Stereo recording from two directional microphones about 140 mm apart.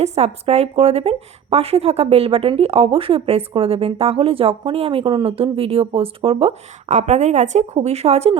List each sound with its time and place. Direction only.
0.0 s a woman's voice: 50° right (ahead or behind)
6.8 s a woman's voice: 55° right (ahead or behind)